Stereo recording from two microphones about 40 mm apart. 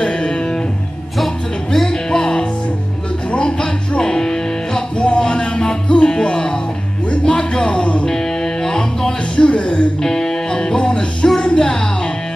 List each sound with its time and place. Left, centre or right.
0.0 s music: left
1.1 s music: centre
1.9 s music: centre
4.0 s music: centre
9.5 s music: left
10.0 s music: centre